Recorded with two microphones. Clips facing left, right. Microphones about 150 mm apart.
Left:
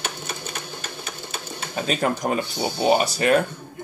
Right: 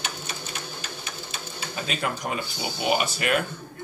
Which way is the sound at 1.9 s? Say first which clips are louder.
Left 7 dB; 40° left (ahead or behind).